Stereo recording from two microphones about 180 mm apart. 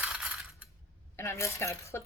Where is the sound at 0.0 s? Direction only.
5° right (ahead or behind).